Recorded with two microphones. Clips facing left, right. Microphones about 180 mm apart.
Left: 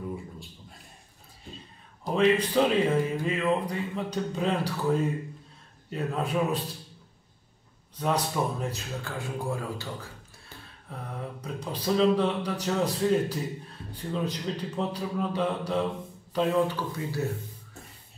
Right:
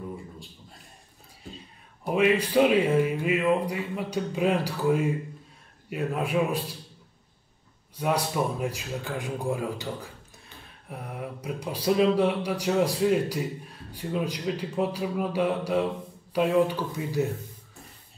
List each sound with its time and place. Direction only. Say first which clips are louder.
2.0 s speech: even; 10° right (ahead or behind)
7.9 s speech: right 1 dB; 10° right (ahead or behind)
10.9 s speech: right 2 dB; 10° right (ahead or behind)